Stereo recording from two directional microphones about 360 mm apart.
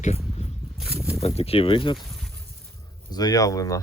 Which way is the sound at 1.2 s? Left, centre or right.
Centre.